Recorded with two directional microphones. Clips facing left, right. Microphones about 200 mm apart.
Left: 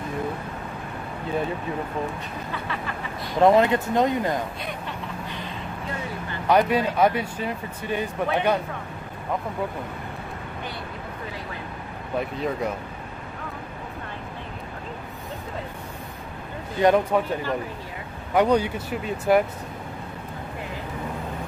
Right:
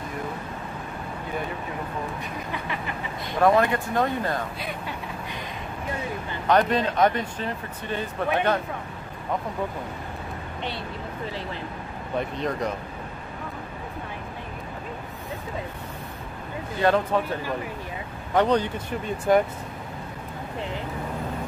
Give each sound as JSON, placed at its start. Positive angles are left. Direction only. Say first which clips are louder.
{"t": 3.3, "sound": "speech", "louder": "left 3 dB", "side_deg": 20}
{"t": 6.4, "sound": "speech", "louder": "left 1 dB", "side_deg": 10}
{"t": 12.2, "sound": "speech", "louder": "left 1 dB", "side_deg": 5}
{"t": 16.8, "sound": "speech", "louder": "left 3 dB", "side_deg": 15}